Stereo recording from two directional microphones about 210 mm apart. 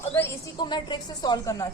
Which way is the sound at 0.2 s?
15° left (ahead or behind).